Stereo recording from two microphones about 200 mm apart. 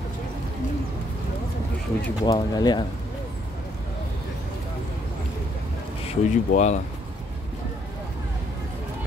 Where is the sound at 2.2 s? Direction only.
20° left (ahead or behind).